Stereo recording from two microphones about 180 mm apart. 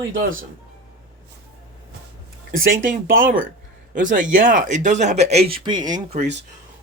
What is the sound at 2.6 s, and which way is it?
Speech, 50° right (ahead or behind).